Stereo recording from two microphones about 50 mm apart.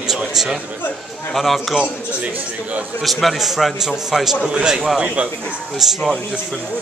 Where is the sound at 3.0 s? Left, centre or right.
Centre.